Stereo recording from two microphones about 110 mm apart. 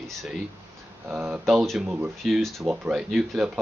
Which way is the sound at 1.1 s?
15° right (ahead or behind).